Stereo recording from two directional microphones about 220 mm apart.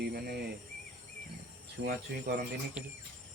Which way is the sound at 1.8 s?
50° right (ahead or behind).